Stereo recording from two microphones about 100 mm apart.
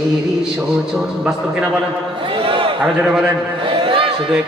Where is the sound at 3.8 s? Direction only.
60° right (ahead or behind).